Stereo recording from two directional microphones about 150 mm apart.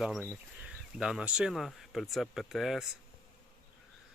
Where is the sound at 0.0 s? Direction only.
5° right (ahead or behind).